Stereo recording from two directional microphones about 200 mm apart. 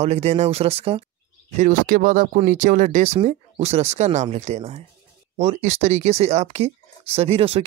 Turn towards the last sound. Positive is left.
turn(degrees=-30)  # may be behind; listen again after turning